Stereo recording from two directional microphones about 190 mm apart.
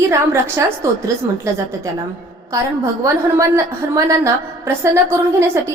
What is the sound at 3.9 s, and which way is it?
A woman's voice, 15° right (ahead or behind).